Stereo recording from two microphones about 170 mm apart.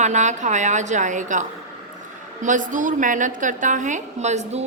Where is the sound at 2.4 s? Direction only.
50° right (ahead or behind).